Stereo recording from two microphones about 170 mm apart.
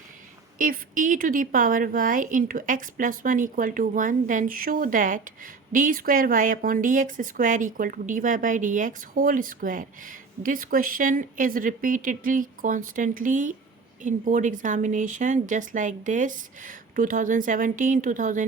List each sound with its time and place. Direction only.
0.6 s a woman's voice: 50° right (ahead or behind)